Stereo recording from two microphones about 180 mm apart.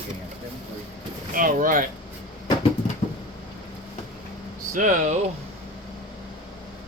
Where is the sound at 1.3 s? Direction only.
50° right (ahead or behind).